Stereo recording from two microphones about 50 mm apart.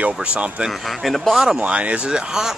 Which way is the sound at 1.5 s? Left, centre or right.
Right.